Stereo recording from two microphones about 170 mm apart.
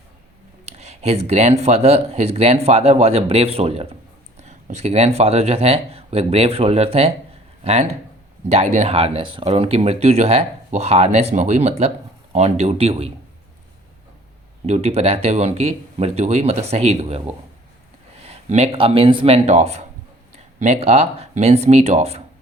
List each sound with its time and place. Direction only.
0.6 s speech: 40° right (ahead or behind)
14.7 s speech: 40° right (ahead or behind)